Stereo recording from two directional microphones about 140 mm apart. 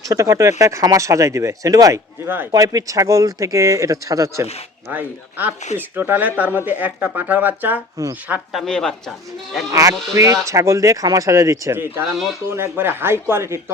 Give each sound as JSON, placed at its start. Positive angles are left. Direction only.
{"t": 0.0, "sound": "speech", "side_deg": -25}
{"t": 4.9, "sound": "speech", "side_deg": -10}
{"t": 8.0, "sound": "speech", "side_deg": -25}
{"t": 8.3, "sound": "speech", "side_deg": 0}
{"t": 10.4, "sound": "speech", "side_deg": -25}
{"t": 12.0, "sound": "speech", "side_deg": 0}
{"t": 12.5, "sound": "speech", "side_deg": -15}